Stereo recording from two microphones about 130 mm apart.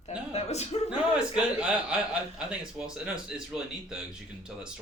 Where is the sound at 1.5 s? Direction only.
10° right (ahead or behind).